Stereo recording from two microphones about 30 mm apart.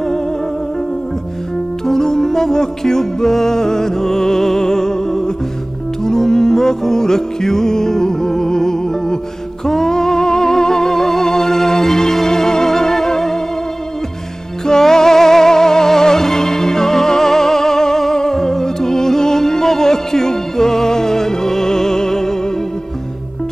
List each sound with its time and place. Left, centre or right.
1.9 s music: centre
14.7 s music: centre